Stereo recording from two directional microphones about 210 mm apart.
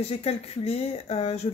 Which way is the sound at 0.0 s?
30° left (ahead or behind).